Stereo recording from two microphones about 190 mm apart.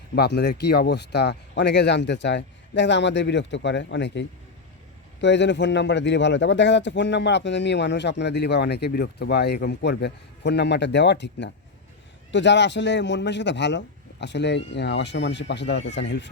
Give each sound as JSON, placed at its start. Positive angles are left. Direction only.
{"t": 0.2, "sound": "a man's voice", "side_deg": 60}